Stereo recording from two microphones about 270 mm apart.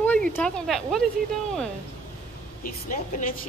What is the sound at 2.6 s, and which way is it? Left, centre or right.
Speech, left.